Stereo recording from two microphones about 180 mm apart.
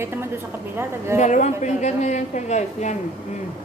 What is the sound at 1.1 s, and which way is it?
A woman's voice, 40° left (ahead or behind).